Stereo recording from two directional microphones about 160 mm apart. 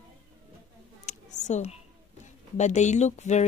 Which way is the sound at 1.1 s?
45° left (ahead or behind).